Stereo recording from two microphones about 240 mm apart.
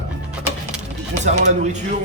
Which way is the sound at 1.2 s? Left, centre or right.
Right.